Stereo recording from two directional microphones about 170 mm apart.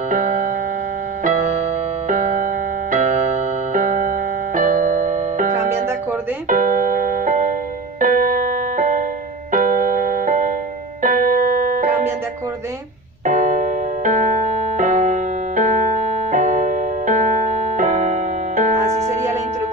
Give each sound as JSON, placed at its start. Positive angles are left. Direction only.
{"t": 0.1, "sound": "music", "side_deg": -45}
{"t": 6.5, "sound": "keyboard", "side_deg": -50}
{"t": 8.0, "sound": "music", "side_deg": -50}
{"t": 11.0, "sound": "keyboard", "side_deg": -50}
{"t": 13.2, "sound": "keyboard", "side_deg": -50}